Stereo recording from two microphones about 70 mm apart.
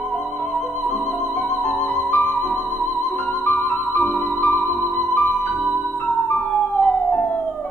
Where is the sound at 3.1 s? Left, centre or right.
Left.